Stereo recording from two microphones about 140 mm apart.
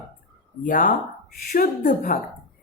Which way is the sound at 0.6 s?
75° left (ahead or behind).